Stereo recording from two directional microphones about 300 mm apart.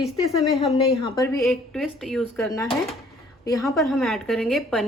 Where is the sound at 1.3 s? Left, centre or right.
Centre.